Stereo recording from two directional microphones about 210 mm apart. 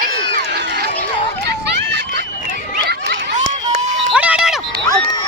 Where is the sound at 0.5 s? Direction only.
55° right (ahead or behind).